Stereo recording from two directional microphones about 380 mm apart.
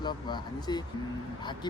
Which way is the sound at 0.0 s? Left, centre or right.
Centre.